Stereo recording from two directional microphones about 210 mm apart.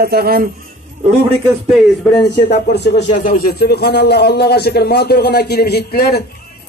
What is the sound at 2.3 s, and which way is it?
A man's voice, 50° left (ahead or behind).